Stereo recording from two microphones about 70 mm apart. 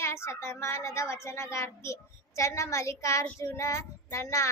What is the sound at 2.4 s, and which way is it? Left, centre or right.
Child singing, left.